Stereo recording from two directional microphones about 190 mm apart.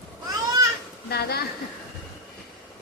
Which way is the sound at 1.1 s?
55° left (ahead or behind).